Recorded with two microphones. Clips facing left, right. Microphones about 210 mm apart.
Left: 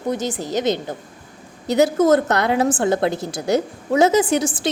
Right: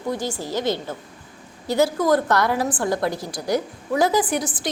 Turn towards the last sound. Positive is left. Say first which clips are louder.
# left 5 dB
turn(degrees=25)  # may be behind; listen again after turning